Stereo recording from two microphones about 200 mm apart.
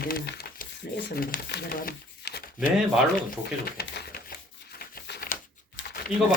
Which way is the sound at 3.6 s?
50° left (ahead or behind).